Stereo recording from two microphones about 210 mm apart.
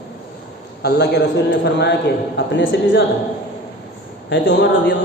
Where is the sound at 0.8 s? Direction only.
50° left (ahead or behind).